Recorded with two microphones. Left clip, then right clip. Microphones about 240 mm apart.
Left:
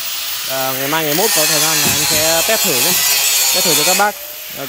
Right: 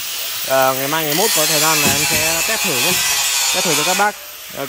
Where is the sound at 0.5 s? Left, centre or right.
Centre.